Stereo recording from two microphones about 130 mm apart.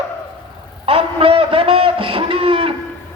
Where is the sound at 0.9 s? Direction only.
45° right (ahead or behind).